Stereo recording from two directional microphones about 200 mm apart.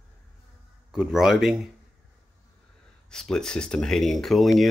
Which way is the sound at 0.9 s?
Centre (ahead or behind).